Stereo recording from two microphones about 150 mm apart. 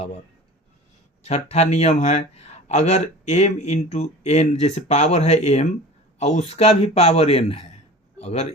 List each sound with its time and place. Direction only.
1.2 s a man's voice: 45° left (ahead or behind)